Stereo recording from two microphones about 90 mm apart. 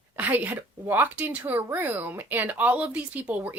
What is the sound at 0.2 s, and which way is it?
Speech, 20° right (ahead or behind).